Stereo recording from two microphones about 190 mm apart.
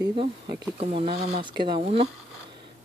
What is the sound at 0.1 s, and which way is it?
Speech, 25° right (ahead or behind).